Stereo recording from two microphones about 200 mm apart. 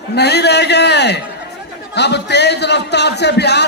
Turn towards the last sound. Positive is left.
turn(degrees=55)  # may be behind; listen again after turning